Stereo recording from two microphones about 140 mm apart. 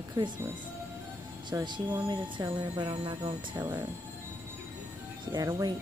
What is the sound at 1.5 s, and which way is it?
A woman's voice, 20° right (ahead or behind).